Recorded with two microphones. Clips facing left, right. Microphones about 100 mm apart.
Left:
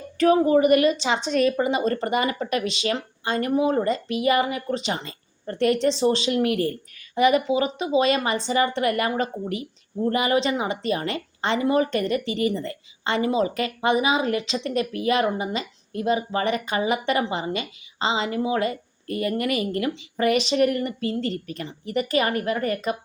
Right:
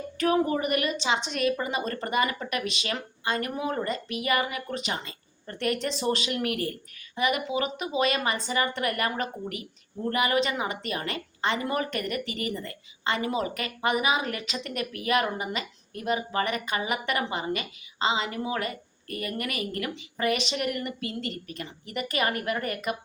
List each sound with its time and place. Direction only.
0.2 s a woman's voice: 35° left (ahead or behind)